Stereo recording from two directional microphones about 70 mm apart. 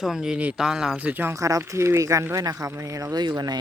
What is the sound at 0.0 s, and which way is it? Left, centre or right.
Speech, centre.